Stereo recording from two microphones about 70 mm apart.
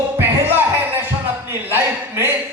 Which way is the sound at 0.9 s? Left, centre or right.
Right.